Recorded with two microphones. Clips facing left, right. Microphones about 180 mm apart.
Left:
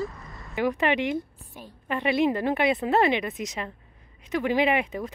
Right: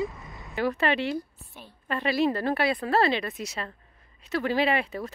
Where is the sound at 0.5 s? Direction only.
15° left (ahead or behind).